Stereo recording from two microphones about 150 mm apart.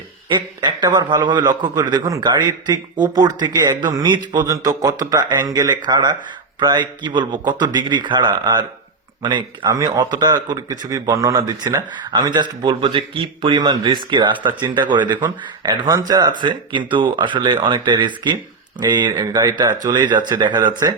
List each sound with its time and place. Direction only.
0.3 s a man's voice: 30° right (ahead or behind)